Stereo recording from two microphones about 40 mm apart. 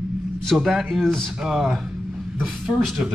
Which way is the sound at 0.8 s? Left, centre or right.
Centre.